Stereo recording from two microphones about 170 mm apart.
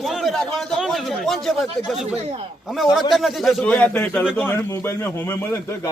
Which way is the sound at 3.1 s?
Centre (ahead or behind).